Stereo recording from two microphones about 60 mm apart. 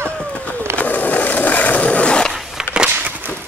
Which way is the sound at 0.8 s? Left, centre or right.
Left.